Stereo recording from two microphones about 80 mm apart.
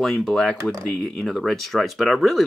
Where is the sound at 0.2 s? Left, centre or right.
Centre.